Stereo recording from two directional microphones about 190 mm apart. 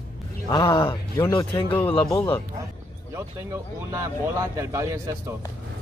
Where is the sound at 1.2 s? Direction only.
15° left (ahead or behind).